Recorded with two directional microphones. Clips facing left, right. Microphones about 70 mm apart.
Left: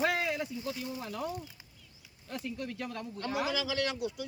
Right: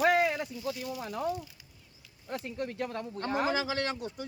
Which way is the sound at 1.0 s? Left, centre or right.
Right.